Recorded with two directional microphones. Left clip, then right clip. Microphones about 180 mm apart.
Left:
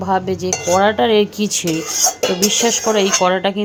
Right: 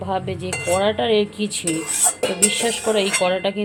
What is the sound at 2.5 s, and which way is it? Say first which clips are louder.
Speech: left 5 dB; 20° left (ahead or behind).